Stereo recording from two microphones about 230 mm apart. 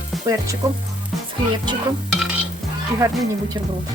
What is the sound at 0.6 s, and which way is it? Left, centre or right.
Speech, centre.